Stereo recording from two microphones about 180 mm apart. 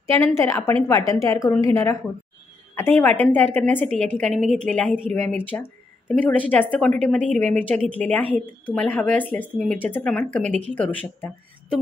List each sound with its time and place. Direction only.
0.4 s a woman's voice: 15° left (ahead or behind)